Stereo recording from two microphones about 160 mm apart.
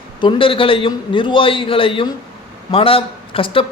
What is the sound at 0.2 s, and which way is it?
Speech, 30° left (ahead or behind).